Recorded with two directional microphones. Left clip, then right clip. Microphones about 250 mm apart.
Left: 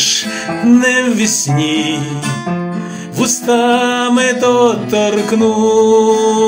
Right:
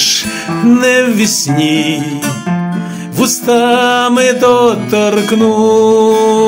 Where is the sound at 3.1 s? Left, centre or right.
Right.